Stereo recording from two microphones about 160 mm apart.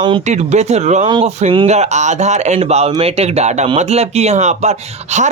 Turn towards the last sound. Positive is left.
turn(degrees=-45)  # may be behind; listen again after turning